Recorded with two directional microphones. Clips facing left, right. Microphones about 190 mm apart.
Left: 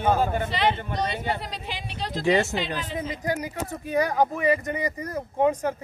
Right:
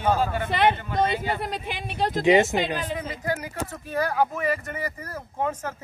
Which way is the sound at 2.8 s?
45° right (ahead or behind).